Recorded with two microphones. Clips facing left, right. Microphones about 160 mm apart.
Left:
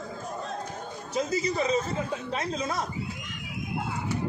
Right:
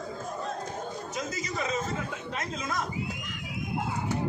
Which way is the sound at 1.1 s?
30° left (ahead or behind).